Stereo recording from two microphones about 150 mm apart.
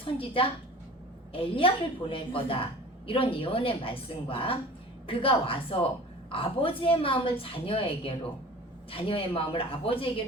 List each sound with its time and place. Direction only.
0.0 s a woman's voice: 35° left (ahead or behind)